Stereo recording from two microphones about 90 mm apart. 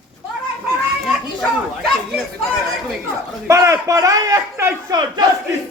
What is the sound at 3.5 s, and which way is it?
A man's voice, 35° right (ahead or behind).